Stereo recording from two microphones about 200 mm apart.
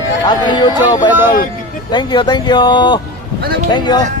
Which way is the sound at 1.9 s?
20° left (ahead or behind).